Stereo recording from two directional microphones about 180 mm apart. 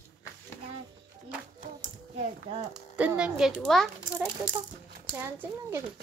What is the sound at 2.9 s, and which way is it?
Speech, 5° right (ahead or behind).